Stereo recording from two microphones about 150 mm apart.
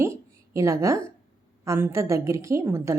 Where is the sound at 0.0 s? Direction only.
20° right (ahead or behind).